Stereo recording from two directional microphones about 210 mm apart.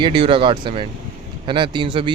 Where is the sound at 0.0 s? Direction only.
25° right (ahead or behind).